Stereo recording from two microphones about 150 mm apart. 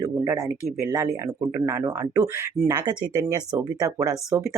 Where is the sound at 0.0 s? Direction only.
20° right (ahead or behind).